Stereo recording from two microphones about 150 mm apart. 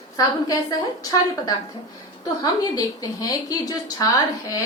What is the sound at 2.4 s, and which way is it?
A woman's voice, 25° left (ahead or behind).